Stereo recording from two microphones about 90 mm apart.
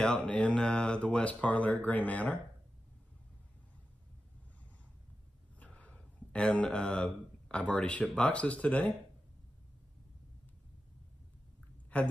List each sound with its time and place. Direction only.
0.0 s speech: 10° left (ahead or behind)
5.6 s speech: 15° left (ahead or behind)
11.9 s a woman's voice: 15° left (ahead or behind)